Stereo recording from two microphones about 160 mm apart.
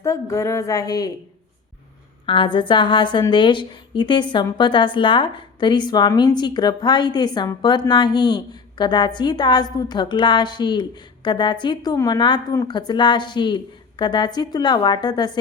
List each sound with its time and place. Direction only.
0.0 s a woman's voice: 20° left (ahead or behind)
2.2 s a woman's voice: 30° left (ahead or behind)